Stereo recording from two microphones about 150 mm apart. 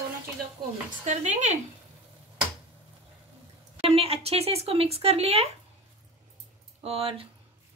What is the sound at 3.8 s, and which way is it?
Speech, 40° right (ahead or behind).